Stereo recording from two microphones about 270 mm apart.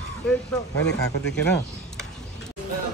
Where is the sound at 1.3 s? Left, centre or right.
Centre.